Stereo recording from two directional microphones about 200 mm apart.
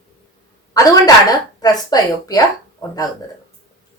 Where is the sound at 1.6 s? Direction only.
20° left (ahead or behind).